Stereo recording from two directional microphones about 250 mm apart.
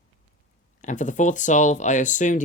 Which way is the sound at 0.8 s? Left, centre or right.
Left.